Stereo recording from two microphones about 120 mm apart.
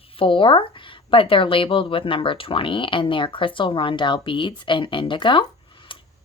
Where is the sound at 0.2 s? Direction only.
45° left (ahead or behind).